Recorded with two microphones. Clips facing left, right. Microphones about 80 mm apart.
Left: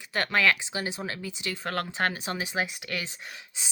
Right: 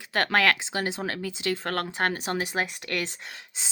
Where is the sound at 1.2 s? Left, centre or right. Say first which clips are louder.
Right 6 dB; right.